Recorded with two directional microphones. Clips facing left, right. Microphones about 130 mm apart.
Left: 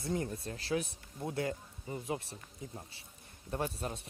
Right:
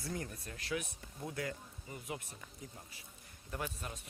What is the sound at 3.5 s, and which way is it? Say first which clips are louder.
Speech: left 6 dB; 35° left (ahead or behind).